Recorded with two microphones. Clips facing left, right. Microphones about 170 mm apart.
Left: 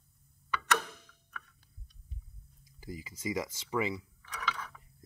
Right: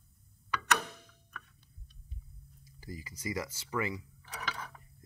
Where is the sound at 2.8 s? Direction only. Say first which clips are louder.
Left 2 dB; 15° left (ahead or behind).